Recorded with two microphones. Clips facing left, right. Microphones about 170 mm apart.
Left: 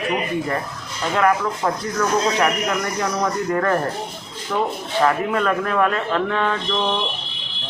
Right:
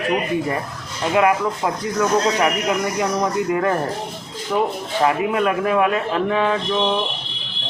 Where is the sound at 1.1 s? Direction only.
15° right (ahead or behind).